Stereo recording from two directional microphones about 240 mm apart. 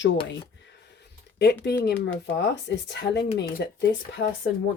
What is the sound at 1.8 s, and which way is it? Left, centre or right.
Speech, left.